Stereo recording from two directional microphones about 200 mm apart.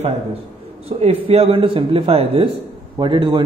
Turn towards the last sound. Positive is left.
turn(degrees=-25)  # may be behind; listen again after turning